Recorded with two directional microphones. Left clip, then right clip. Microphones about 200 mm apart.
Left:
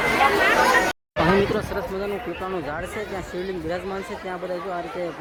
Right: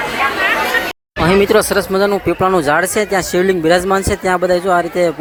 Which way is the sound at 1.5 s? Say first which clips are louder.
Right 14 dB; 35° right (ahead or behind).